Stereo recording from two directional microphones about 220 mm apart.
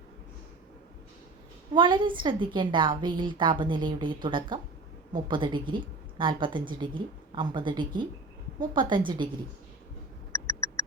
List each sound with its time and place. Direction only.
1.7 s a woman's voice: 20° right (ahead or behind)